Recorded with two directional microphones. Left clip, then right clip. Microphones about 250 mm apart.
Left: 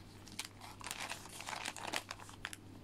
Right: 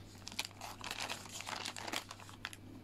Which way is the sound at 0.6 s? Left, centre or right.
Centre.